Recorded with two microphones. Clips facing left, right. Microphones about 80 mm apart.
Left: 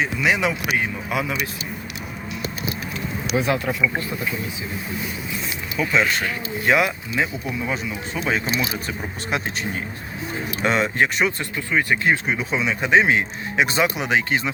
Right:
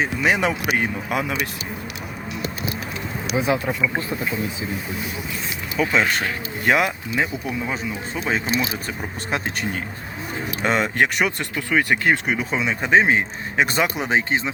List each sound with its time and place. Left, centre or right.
0.0 s speech: right
3.3 s speech: centre
5.7 s speech: right
7.7 s speech: right
9.3 s speech: right